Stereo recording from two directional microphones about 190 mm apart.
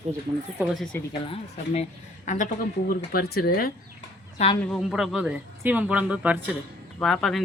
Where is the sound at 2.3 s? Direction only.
40° left (ahead or behind).